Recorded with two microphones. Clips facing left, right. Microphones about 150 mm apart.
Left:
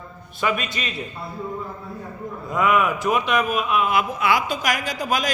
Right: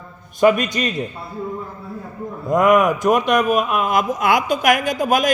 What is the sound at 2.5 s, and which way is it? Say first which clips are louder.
Speech: right 6 dB; 45° right (ahead or behind).